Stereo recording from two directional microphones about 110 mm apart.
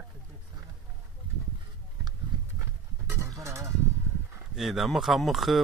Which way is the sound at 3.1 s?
25° right (ahead or behind).